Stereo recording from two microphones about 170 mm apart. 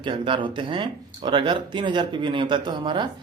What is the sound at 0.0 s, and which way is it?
Speech, 30° right (ahead or behind).